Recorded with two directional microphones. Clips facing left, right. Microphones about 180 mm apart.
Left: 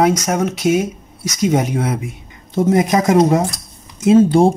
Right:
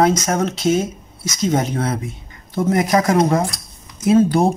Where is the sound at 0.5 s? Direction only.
15° left (ahead or behind).